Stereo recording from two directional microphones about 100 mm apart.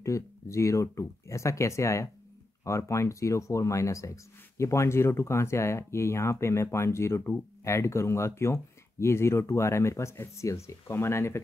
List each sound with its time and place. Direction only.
0.0 s speech: 30° left (ahead or behind)